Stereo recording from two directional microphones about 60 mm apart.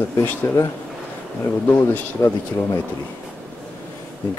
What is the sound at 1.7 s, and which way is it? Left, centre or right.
Speech, left.